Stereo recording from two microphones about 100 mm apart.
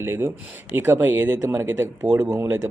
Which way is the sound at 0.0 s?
25° right (ahead or behind).